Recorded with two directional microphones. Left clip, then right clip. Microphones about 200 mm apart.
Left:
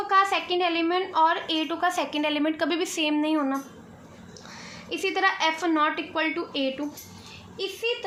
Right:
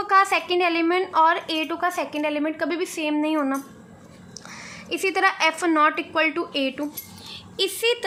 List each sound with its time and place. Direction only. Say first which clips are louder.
0.1 s a woman's voice: right 3 dB; 15° right (ahead or behind)
4.9 s a woman's voice: right 3 dB; 15° right (ahead or behind)
7.5 s a woman's voice: right 6 dB; 35° right (ahead or behind)